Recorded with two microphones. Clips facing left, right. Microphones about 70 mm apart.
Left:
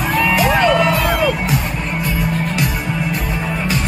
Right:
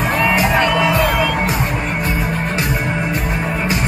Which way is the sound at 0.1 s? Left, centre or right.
Right.